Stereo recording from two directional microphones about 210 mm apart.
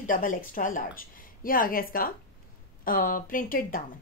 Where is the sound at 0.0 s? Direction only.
40° left (ahead or behind).